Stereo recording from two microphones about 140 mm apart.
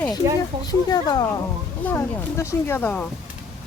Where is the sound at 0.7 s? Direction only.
30° left (ahead or behind).